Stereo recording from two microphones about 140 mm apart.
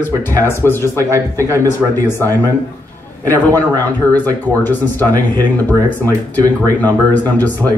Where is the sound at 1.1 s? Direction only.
20° right (ahead or behind).